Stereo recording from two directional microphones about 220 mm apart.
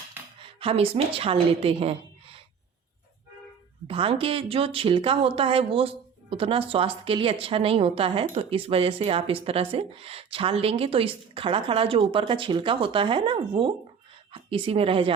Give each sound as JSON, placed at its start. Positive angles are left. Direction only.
{"t": 0.3, "sound": "a woman's voice", "side_deg": -25}
{"t": 3.8, "sound": "speech", "side_deg": -25}